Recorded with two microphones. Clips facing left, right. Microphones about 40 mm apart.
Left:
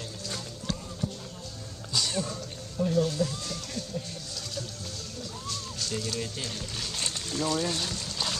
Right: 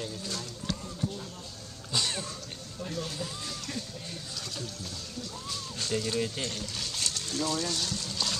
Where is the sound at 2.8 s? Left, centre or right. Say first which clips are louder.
Left 10 dB; centre.